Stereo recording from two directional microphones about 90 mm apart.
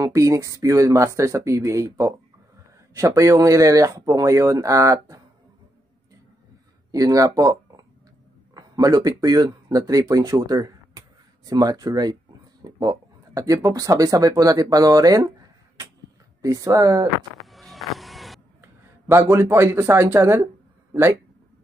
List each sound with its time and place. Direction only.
0.0 s speech: 35° right (ahead or behind)
6.9 s speech: 40° right (ahead or behind)
16.3 s speech: 40° right (ahead or behind)
17.5 s music: centre (ahead or behind)
18.6 s speech: 25° right (ahead or behind)